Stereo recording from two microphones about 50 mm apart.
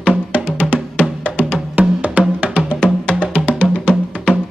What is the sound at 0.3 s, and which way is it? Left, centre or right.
Music, left.